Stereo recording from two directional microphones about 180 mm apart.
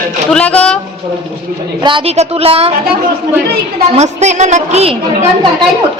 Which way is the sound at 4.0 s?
40° right (ahead or behind).